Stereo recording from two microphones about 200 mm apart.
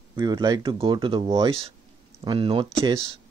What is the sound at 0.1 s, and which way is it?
Speech, 20° right (ahead or behind).